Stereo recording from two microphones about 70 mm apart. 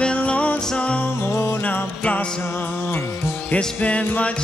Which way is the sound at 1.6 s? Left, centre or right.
Left.